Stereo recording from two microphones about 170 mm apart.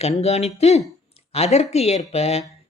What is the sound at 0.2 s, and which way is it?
Speech, 40° left (ahead or behind).